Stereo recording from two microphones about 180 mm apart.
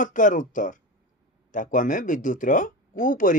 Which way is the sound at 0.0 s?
45° left (ahead or behind).